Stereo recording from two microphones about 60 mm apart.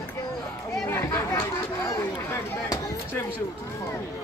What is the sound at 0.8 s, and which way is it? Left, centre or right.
Speech, left.